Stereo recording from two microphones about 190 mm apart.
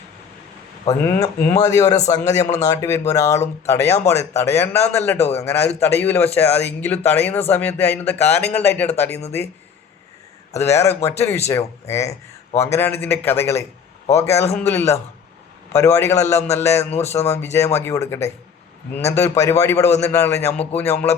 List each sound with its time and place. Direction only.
0.9 s speech: 15° left (ahead or behind)
5.1 s a man's voice: 35° left (ahead or behind)
5.4 s speech: 15° left (ahead or behind)
10.6 s speech: 15° left (ahead or behind)